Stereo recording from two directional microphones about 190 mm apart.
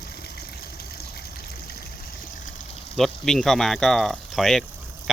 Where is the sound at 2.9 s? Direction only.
Centre (ahead or behind).